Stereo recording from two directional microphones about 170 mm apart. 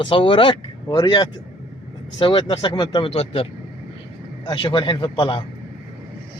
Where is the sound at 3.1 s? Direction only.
40° left (ahead or behind).